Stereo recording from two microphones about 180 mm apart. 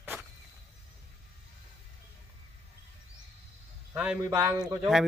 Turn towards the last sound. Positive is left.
turn(degrees=-15)  # may be behind; listen again after turning